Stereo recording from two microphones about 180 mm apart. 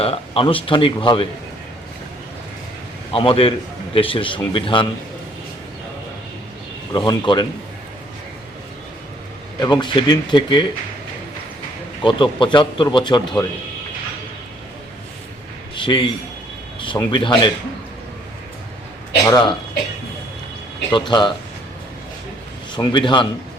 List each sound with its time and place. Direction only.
0.0 s speech: 30° left (ahead or behind)
3.1 s a man's voice: 30° left (ahead or behind)
6.9 s speech: 25° left (ahead or behind)
9.6 s speech: 25° left (ahead or behind)
12.0 s speech: 25° left (ahead or behind)
15.7 s a man's voice: 25° left (ahead or behind)
19.2 s speech: 20° left (ahead or behind)
20.9 s speech: 25° left (ahead or behind)
22.7 s speech: 25° left (ahead or behind)